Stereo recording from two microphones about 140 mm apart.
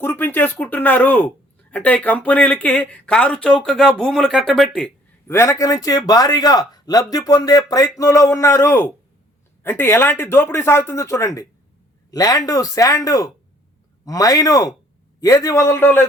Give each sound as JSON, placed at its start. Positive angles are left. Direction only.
{"t": 0.0, "sound": "a man's voice", "side_deg": 15}
{"t": 5.3, "sound": "a man's voice", "side_deg": 20}